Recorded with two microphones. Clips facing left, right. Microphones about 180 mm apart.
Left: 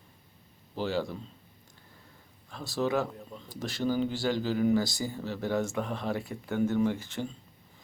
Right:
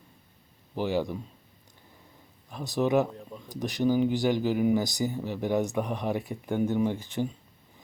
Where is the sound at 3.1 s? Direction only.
5° right (ahead or behind).